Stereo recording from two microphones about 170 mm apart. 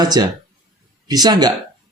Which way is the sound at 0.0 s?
25° right (ahead or behind).